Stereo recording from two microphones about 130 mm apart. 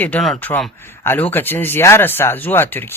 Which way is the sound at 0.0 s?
10° left (ahead or behind).